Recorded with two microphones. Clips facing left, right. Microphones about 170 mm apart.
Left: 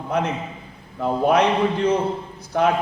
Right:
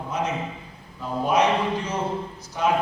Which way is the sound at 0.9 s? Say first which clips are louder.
Left 4 dB; 60° left (ahead or behind).